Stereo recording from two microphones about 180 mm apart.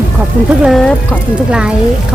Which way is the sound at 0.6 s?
Centre (ahead or behind).